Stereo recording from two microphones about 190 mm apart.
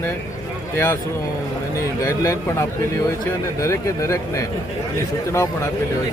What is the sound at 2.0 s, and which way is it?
A man's voice, 15° left (ahead or behind).